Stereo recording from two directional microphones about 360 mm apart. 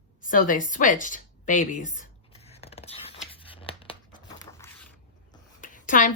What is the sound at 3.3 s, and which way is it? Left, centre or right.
Tearing, centre.